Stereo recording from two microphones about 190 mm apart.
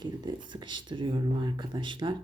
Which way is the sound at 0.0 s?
25° right (ahead or behind).